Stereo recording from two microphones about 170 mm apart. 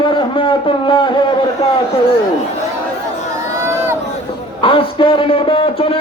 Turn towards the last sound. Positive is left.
turn(degrees=35)  # may be behind; listen again after turning